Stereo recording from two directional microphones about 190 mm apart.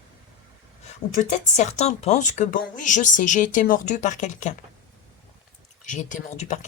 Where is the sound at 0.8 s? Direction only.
40° left (ahead or behind).